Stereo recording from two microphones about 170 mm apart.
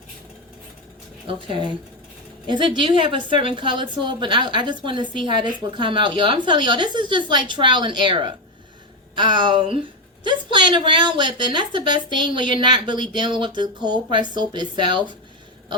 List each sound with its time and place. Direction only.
1.3 s a woman's voice: 30° right (ahead or behind)